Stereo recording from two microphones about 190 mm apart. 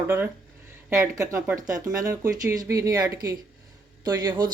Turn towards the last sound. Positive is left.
turn(degrees=-20)  # may be behind; listen again after turning